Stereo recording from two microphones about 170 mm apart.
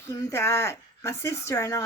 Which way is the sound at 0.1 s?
15° left (ahead or behind).